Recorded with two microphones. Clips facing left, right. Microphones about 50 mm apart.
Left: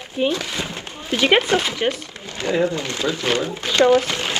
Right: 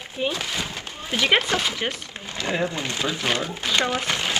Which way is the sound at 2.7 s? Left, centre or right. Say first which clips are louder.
Left 4 dB; right.